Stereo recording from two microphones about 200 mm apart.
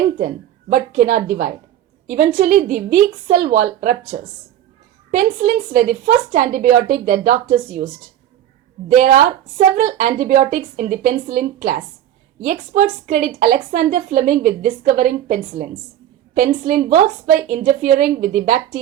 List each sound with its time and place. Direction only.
0.7 s a woman's voice: 40° right (ahead or behind)
9.0 s a woman's voice: 40° right (ahead or behind)